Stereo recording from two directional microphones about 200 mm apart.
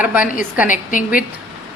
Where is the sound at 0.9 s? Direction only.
40° left (ahead or behind).